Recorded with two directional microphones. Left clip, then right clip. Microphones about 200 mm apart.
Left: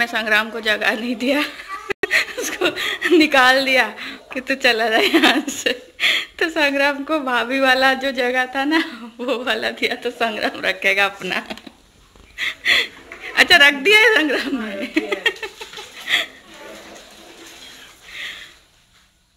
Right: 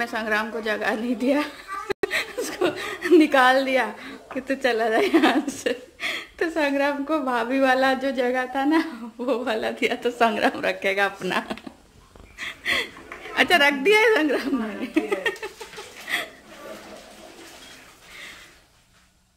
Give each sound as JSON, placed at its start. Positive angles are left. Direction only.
{"t": 0.0, "sound": "a woman's voice", "side_deg": 0}
{"t": 12.6, "sound": "a woman's voice", "side_deg": -10}